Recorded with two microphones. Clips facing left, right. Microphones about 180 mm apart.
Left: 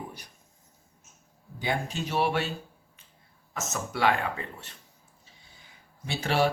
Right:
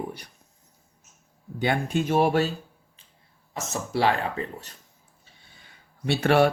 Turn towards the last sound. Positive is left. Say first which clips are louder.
# right 6 dB
turn(degrees=-60)  # may be behind; listen again after turning